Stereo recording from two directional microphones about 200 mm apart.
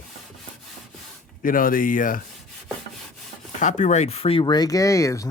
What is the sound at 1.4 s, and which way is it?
Speech, 45° left (ahead or behind).